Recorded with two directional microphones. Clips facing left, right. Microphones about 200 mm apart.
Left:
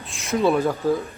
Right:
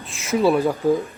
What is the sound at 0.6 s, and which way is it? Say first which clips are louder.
Speech: right 2 dB; 15° right (ahead or behind).